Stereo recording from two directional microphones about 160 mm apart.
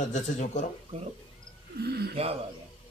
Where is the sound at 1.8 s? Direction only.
85° right.